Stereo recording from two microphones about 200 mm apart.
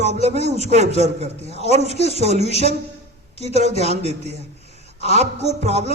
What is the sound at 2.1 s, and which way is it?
A man's voice, 35° right (ahead or behind).